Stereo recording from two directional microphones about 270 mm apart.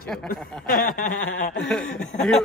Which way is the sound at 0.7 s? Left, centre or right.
Left.